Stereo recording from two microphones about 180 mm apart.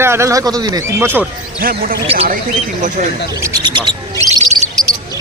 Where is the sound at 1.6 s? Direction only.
55° right (ahead or behind).